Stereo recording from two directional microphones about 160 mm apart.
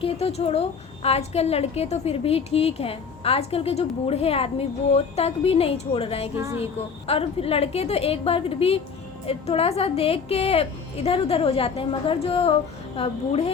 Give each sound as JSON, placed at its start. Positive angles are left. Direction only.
{"t": 0.0, "sound": "a woman's voice", "side_deg": 40}
{"t": 6.3, "sound": "a woman's voice", "side_deg": -15}
{"t": 7.1, "sound": "a woman's voice", "side_deg": 35}